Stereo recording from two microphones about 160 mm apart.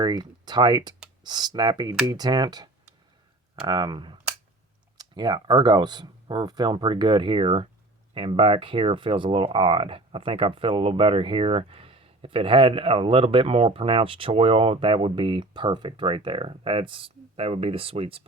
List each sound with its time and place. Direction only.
0.0 s speech: 25° right (ahead or behind)
3.7 s speech: 30° right (ahead or behind)